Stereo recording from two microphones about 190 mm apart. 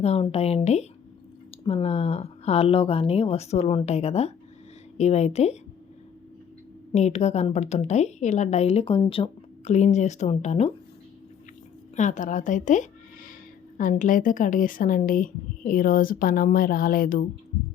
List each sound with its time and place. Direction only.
0.0 s a woman's voice: 30° left (ahead or behind)
6.9 s a woman's voice: 35° left (ahead or behind)
11.9 s speech: 40° left (ahead or behind)